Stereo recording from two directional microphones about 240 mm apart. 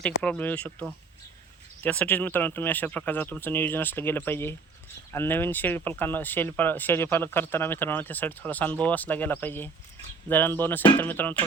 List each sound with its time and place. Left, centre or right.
0.0 s speech: centre